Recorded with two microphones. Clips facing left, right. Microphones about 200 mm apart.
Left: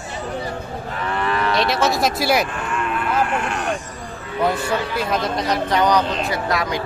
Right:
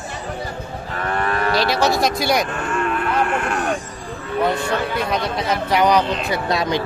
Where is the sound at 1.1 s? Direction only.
50° right (ahead or behind).